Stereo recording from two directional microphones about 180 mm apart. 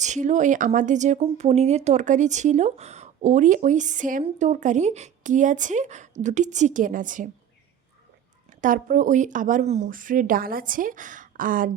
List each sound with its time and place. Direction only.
0.0 s speech: 40° right (ahead or behind)
8.4 s speech: 45° right (ahead or behind)